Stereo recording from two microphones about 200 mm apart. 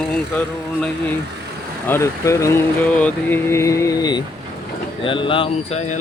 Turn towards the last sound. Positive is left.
turn(degrees=35)  # may be behind; listen again after turning